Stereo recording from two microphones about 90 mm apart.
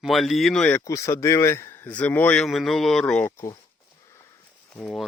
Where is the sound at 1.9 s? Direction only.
15° left (ahead or behind).